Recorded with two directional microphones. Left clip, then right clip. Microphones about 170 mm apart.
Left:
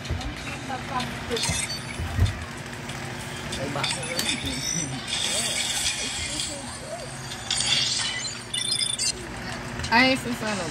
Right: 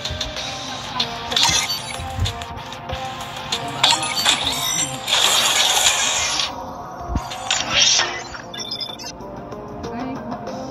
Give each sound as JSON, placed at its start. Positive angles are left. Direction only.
{"t": 1.3, "sound": "music", "side_deg": -50}
{"t": 3.4, "sound": "music", "side_deg": -55}